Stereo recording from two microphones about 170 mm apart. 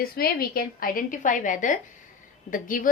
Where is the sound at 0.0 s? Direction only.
65° left (ahead or behind).